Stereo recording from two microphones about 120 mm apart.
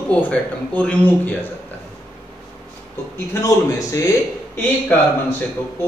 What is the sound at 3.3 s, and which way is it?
Speech, 25° left (ahead or behind).